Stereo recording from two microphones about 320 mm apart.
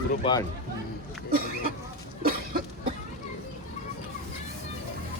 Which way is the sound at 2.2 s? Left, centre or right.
Right.